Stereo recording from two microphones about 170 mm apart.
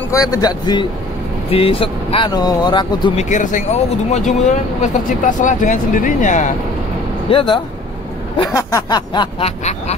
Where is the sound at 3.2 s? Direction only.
45° left (ahead or behind).